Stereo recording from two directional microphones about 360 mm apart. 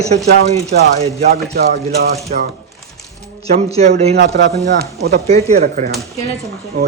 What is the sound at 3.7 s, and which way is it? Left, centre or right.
Speech, centre.